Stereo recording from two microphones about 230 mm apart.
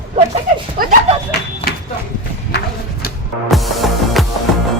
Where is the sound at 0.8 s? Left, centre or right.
Right.